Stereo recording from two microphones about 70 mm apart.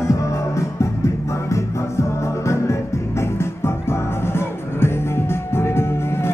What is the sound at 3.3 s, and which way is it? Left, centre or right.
Music, left.